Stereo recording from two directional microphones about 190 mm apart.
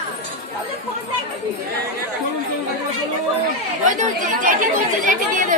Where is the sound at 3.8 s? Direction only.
45° right (ahead or behind).